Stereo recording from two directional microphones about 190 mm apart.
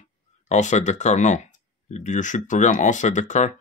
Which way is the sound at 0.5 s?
40° left (ahead or behind).